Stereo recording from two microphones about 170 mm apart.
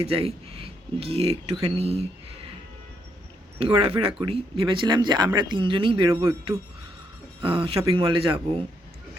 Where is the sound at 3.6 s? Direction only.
35° right (ahead or behind).